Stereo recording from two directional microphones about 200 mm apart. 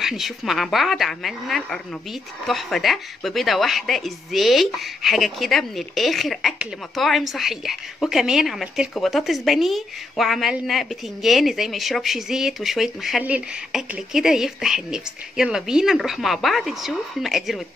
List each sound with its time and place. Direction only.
0.0 s a woman's voice: centre (ahead or behind)